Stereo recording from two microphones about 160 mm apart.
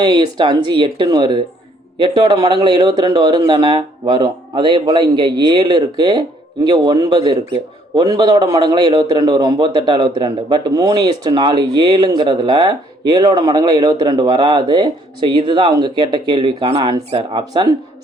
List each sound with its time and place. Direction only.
0.0 s a man's voice: 30° right (ahead or behind)